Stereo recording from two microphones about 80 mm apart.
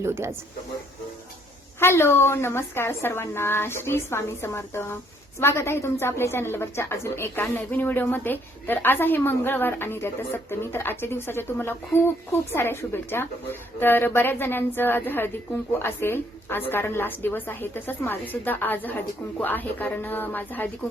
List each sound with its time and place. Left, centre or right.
0.0 s speech: right
1.8 s a woman's voice: left